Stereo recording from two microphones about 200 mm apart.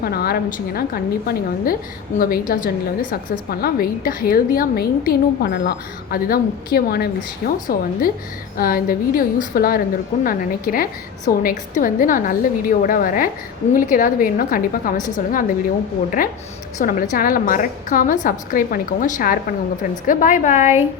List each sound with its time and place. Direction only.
0.0 s a woman's voice: 50° left (ahead or behind)
16.2 s a woman's voice: 45° left (ahead or behind)